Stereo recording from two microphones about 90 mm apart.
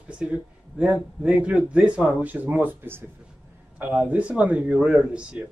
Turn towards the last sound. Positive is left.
turn(degrees=-10)  # may be behind; listen again after turning